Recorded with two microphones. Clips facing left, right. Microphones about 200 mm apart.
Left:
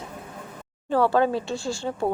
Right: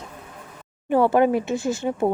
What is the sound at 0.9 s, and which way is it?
Speech, 20° right (ahead or behind).